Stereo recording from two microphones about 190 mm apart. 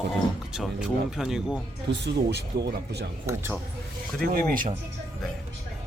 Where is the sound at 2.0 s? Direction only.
60° right (ahead or behind).